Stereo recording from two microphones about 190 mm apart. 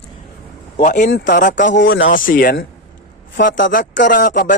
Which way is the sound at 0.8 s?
40° left (ahead or behind).